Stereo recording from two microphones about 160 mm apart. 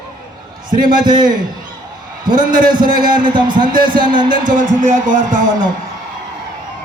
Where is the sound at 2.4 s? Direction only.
60° right (ahead or behind).